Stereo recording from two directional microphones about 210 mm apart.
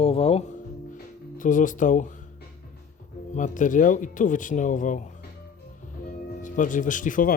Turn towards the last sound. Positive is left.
turn(degrees=40)  # may be behind; listen again after turning